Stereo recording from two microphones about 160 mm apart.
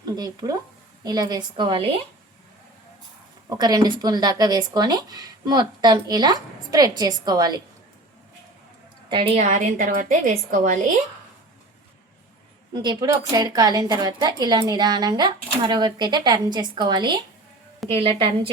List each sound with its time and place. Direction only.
0.2 s a woman's voice: 25° right (ahead or behind)
3.5 s a woman's voice: 25° right (ahead or behind)
9.0 s a woman's voice: 35° right (ahead or behind); by 10.9 s 60° right (ahead or behind)
12.7 s a woman's voice: 25° right (ahead or behind)